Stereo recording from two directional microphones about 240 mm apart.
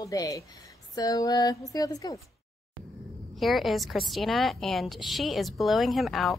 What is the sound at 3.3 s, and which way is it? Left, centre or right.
A woman's voice, centre.